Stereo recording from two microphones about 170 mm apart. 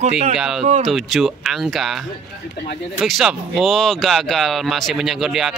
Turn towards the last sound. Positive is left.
turn(degrees=0)  # may be behind; listen again after turning